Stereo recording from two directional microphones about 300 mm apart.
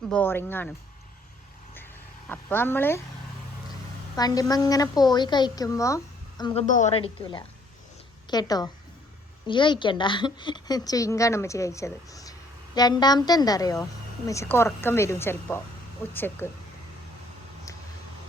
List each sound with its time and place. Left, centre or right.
0.1 s a woman's voice: centre
2.3 s a woman's voice: centre
4.1 s a woman's voice: centre